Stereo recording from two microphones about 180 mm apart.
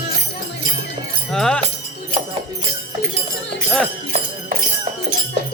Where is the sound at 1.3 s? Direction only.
5° left (ahead or behind).